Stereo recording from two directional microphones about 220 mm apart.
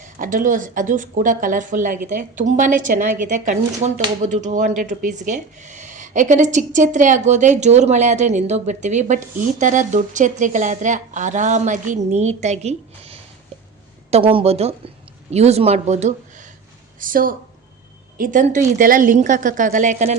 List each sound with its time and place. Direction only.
0.0 s speech: 35° right (ahead or behind)